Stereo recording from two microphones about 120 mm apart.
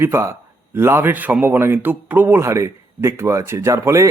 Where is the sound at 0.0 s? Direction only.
20° right (ahead or behind).